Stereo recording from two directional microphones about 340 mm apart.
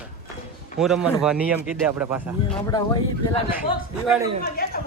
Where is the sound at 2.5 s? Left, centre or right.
Centre.